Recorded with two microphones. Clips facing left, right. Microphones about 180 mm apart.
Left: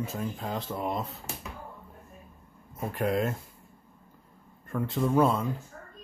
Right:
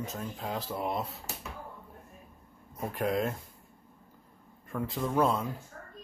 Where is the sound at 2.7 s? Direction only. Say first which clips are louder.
Left 2 dB; centre (ahead or behind).